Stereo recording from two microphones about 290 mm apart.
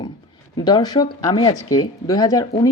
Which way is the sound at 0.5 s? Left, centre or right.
Centre.